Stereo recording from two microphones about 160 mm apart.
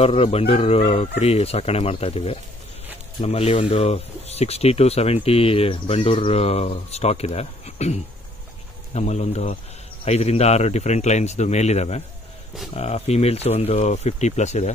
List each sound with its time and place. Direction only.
0.0 s speech: 40° left (ahead or behind)